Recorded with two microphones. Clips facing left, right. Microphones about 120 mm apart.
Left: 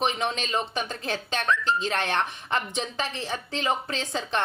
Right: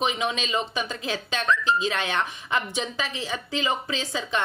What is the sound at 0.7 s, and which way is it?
Speech, 55° left (ahead or behind).